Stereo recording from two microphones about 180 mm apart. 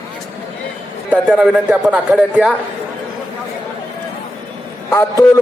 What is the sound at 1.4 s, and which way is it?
Speech, 5° right (ahead or behind).